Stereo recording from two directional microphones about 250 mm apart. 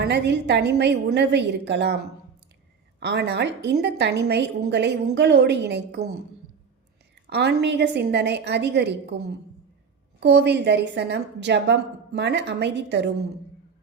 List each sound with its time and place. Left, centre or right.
0.0 s a woman's voice: right
3.0 s a woman's voice: right
7.3 s a woman's voice: right
10.2 s a woman's voice: right